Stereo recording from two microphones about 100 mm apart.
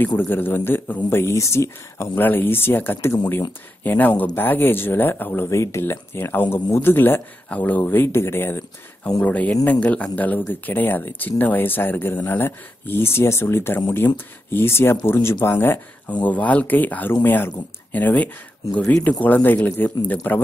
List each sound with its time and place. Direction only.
0.3 s speech: 20° left (ahead or behind)